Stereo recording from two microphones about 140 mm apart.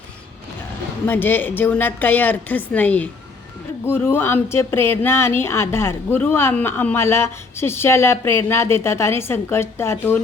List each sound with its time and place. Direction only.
1.0 s speech: 15° left (ahead or behind)